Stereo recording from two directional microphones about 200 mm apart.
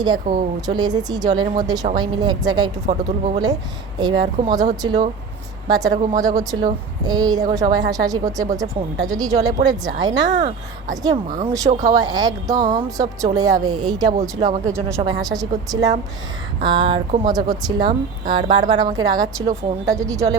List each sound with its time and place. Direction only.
0.3 s speech: 25° right (ahead or behind)
2.8 s speech: 35° right (ahead or behind)
3.4 s speech: 20° right (ahead or behind)